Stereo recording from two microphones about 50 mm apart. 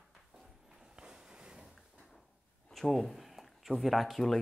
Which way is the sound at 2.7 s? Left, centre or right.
Centre.